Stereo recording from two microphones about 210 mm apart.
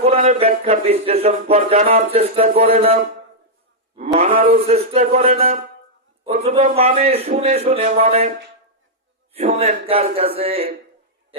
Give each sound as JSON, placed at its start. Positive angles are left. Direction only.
{"t": 0.0, "sound": "a man's voice", "side_deg": -30}
{"t": 3.9, "sound": "a sound", "side_deg": -35}
{"t": 4.4, "sound": "a man's voice", "side_deg": -30}
{"t": 9.3, "sound": "a man's voice", "side_deg": -30}